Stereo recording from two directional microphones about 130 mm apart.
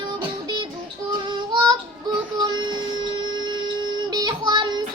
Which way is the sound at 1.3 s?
35° right (ahead or behind).